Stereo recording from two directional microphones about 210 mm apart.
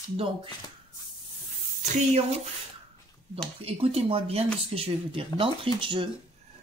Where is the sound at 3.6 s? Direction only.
30° right (ahead or behind).